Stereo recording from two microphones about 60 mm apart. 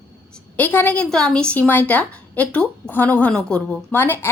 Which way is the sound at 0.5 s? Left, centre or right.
Left.